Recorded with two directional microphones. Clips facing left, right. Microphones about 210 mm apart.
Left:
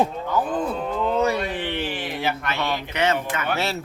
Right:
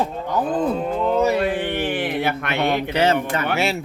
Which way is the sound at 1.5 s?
50° right (ahead or behind).